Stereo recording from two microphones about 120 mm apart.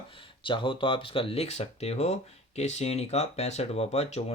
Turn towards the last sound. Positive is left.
turn(degrees=60)  # may be behind; listen again after turning